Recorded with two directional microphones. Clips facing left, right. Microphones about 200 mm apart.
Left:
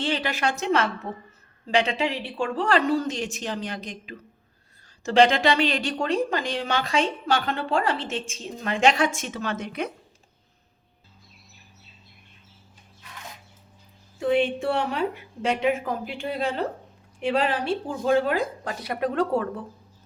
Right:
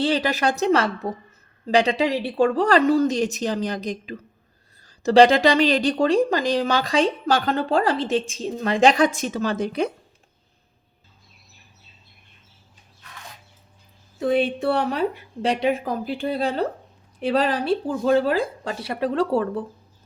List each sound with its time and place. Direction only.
0.0 s speech: 40° right (ahead or behind)
14.2 s speech: 40° right (ahead or behind)